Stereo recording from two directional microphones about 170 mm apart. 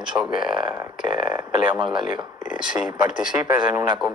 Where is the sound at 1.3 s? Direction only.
10° right (ahead or behind).